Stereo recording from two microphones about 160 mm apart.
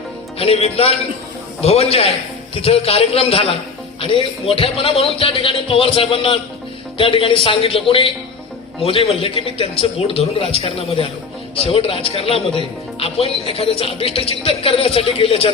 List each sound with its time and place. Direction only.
0.3 s speech: 35° left (ahead or behind)